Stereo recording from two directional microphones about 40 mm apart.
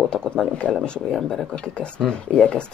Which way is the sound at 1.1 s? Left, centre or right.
Centre.